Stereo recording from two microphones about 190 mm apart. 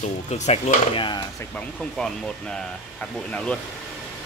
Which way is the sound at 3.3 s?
5° left (ahead or behind).